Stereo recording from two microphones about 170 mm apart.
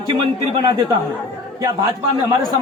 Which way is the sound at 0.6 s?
25° right (ahead or behind).